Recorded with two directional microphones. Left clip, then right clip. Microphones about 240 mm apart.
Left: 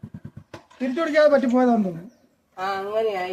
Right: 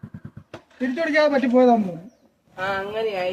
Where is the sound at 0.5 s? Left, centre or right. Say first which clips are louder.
Even; centre.